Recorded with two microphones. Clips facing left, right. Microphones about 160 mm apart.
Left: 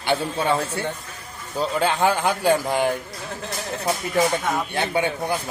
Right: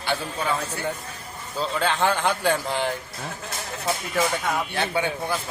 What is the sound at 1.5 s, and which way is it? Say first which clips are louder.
Speech: left 3 dB; 10° left (ahead or behind).